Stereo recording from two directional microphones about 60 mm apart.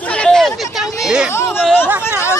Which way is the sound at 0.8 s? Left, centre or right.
Centre.